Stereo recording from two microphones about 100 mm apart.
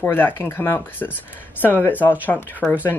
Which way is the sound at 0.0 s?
20° left (ahead or behind).